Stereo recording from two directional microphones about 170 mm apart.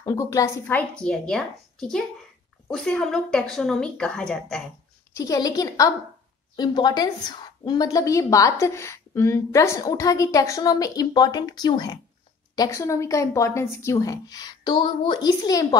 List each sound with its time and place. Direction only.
0.0 s a woman's voice: 20° left (ahead or behind)
0.7 s speech: 5° left (ahead or behind)
5.1 s a woman's voice: 20° left (ahead or behind)